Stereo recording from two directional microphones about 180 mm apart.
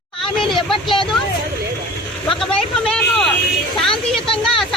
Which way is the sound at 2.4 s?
5° left (ahead or behind).